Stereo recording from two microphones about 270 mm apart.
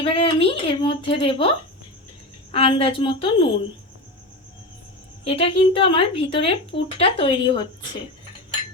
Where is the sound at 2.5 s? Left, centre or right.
Centre.